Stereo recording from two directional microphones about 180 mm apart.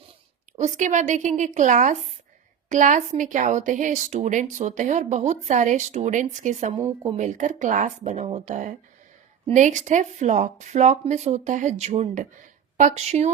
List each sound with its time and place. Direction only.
0.6 s speech: 40° right (ahead or behind)
6.7 s a woman's voice: 30° right (ahead or behind)
7.2 s speech: 45° right (ahead or behind)